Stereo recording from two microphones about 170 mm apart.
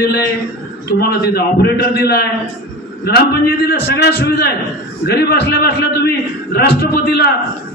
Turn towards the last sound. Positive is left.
turn(degrees=70)  # may be behind; listen again after turning